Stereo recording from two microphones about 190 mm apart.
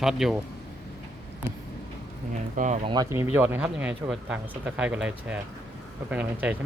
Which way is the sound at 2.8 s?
20° right (ahead or behind).